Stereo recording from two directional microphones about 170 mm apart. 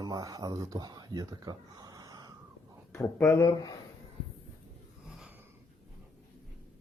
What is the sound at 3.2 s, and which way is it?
Speech, 20° left (ahead or behind).